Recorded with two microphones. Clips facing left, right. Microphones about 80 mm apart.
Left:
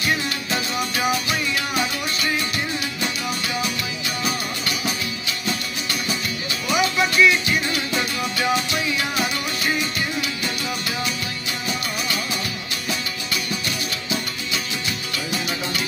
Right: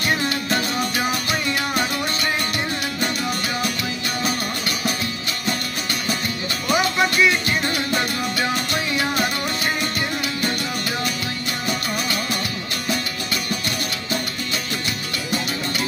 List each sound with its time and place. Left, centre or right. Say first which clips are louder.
6.7 s music: right 1 dB; right